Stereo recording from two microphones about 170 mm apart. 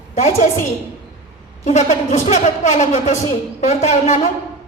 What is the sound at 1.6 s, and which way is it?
Speech, 45° left (ahead or behind).